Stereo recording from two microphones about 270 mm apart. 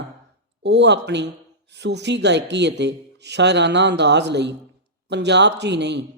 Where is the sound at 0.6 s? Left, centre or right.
Right.